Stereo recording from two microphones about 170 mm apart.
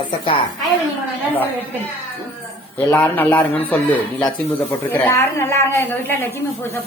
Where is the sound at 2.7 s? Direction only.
10° left (ahead or behind).